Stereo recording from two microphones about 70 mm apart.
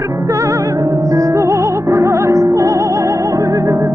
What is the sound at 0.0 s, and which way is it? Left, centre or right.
Music, right.